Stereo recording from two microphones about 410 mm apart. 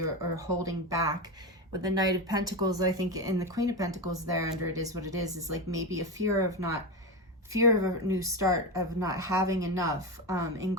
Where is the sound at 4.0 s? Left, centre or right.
Right.